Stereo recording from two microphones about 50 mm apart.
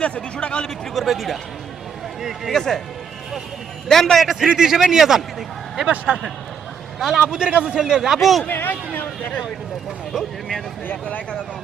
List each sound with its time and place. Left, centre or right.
0.0 s speech: centre
1.0 s speech: centre
2.5 s speech: centre
3.8 s speech: centre
4.2 s a man's voice: centre
5.8 s a man's voice: right; by 8.4 s centre
8.4 s speech: left
10.1 s speech: centre
11.0 s speech: left